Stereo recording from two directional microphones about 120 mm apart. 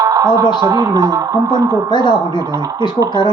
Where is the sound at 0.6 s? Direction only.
30° right (ahead or behind).